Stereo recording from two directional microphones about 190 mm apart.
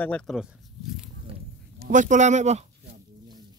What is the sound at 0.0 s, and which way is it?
Speech, 5° left (ahead or behind).